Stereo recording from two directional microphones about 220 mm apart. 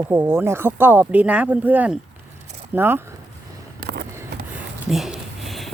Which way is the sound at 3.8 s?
45° right (ahead or behind).